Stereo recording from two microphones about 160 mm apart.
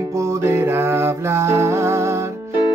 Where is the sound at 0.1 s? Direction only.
20° right (ahead or behind).